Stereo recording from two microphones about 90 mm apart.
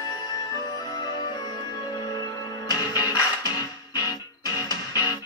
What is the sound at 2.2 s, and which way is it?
Music, 40° left (ahead or behind).